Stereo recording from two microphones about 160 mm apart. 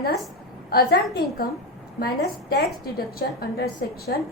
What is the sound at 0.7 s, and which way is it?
Speech, 70° left (ahead or behind).